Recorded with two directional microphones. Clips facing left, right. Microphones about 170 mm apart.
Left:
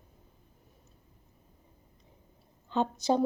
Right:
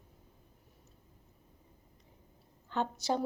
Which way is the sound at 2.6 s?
20° left (ahead or behind).